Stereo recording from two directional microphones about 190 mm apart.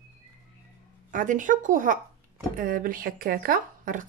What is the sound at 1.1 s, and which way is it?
Speech, 45° right (ahead or behind).